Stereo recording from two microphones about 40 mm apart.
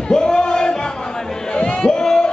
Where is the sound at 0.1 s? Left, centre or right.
Centre.